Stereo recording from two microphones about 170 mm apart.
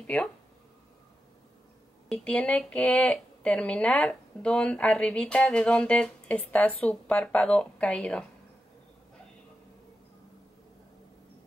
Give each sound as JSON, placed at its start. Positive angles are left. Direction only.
{"t": 0.0, "sound": "speech", "side_deg": 10}
{"t": 2.0, "sound": "speech", "side_deg": 5}